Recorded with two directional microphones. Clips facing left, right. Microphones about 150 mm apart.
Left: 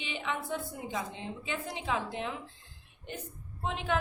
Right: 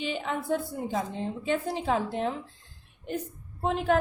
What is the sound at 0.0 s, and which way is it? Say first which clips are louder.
A woman's voice: right 5 dB; 40° right (ahead or behind).